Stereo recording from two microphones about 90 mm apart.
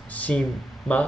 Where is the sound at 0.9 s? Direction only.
5° left (ahead or behind).